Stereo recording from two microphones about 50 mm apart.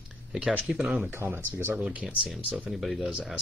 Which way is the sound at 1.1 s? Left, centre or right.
Right.